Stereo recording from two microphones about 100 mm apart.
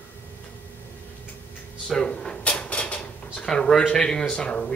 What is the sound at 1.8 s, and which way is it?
Drawer open or close, 5° left (ahead or behind).